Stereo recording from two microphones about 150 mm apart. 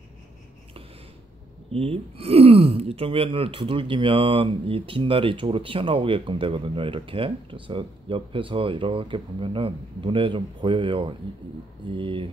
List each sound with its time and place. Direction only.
1.7 s speech: 40° right (ahead or behind)